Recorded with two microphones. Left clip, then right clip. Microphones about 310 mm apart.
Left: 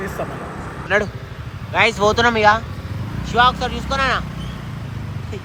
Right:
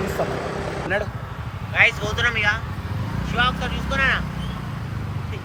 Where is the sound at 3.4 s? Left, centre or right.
Centre.